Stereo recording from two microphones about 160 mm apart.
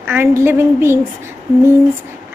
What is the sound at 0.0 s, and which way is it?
Speech, 15° right (ahead or behind).